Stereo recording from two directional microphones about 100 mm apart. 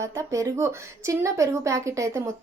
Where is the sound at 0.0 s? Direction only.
30° right (ahead or behind).